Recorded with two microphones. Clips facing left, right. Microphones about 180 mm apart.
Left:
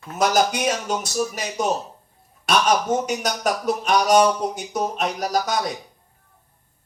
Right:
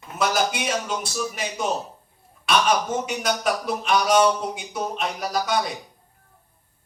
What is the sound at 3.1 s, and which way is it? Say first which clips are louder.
Speech: left 1 dB; 40° left (ahead or behind).